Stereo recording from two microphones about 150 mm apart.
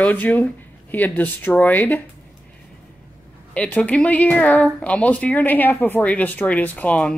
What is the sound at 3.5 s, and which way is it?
Speech, 10° left (ahead or behind).